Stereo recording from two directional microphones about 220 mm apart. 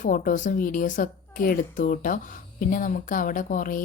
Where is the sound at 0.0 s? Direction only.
35° left (ahead or behind).